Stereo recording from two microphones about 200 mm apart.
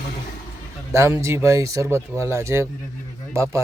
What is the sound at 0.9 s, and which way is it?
Speech, 15° right (ahead or behind).